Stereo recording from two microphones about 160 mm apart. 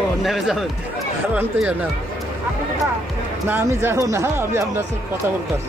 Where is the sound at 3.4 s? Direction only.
15° right (ahead or behind).